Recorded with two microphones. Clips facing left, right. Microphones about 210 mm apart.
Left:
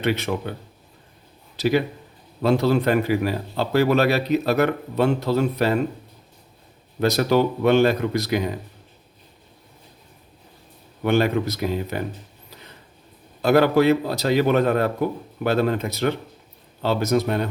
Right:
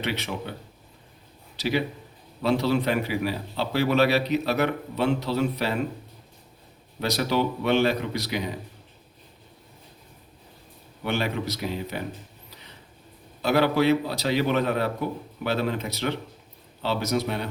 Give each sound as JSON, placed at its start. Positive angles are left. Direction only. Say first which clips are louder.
{"t": 0.0, "sound": "a man's voice", "louder": "left 7 dB", "side_deg": 50}
{"t": 1.5, "sound": "a man's voice", "louder": "left 5 dB", "side_deg": 50}
{"t": 7.0, "sound": "a man's voice", "louder": "left 6 dB", "side_deg": 50}
{"t": 11.0, "sound": "a man's voice", "louder": "left 7 dB", "side_deg": 50}
{"t": 13.4, "sound": "a man's voice", "louder": "left 5 dB", "side_deg": 45}